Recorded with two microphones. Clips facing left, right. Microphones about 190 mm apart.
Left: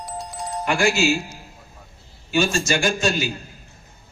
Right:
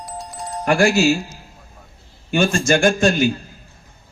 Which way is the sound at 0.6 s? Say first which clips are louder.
Right 5 dB; 40° right (ahead or behind).